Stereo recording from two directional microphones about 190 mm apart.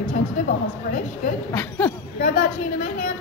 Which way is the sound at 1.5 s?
10° left (ahead or behind).